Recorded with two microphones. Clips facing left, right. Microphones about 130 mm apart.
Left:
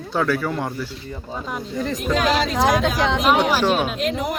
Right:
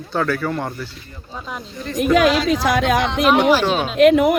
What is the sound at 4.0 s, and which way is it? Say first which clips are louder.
Speech: right 11 dB; 65° right (ahead or behind).